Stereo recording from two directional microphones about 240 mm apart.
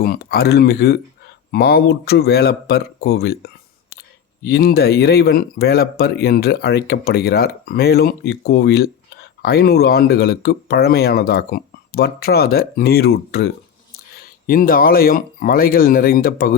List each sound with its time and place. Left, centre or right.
0.0 s speech: left